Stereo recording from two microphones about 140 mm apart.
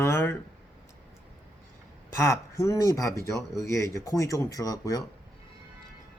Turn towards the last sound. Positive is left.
turn(degrees=25)  # may be behind; listen again after turning